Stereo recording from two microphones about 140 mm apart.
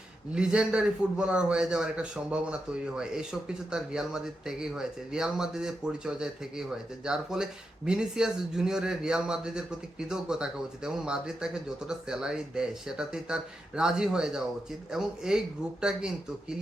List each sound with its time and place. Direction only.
0.3 s a man's voice: 5° right (ahead or behind)
3.7 s speech: 5° right (ahead or behind)